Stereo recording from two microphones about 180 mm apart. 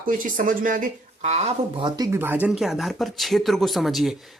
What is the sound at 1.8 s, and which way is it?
Speech, 20° right (ahead or behind).